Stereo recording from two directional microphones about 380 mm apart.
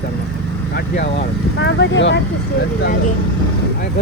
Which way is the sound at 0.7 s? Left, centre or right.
Left.